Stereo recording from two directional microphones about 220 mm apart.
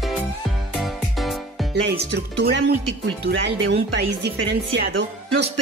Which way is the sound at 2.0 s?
50° right (ahead or behind).